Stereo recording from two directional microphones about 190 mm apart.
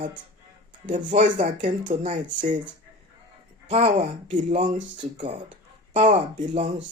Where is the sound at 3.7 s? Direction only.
35° right (ahead or behind).